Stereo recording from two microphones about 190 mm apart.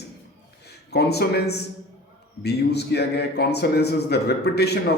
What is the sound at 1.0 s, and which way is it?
A man's voice, 60° left (ahead or behind).